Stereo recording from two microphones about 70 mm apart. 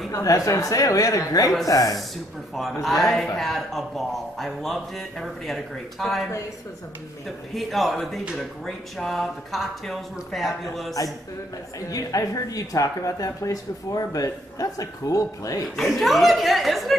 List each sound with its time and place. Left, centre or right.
0.1 s a man's voice: left
1.7 s speech: left
2.5 s speech: centre
7.2 s speech: centre
11.9 s speech: left
15.7 s speech: centre